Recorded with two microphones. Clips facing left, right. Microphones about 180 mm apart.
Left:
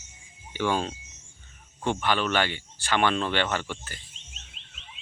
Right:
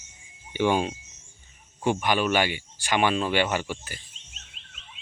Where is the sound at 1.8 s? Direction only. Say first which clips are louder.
Right 2 dB; 10° right (ahead or behind).